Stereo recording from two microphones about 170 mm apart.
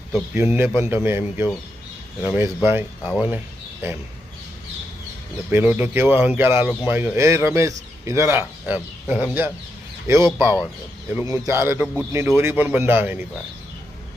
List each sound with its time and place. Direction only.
0.3 s speech: 10° right (ahead or behind)
5.5 s speech: 10° right (ahead or behind)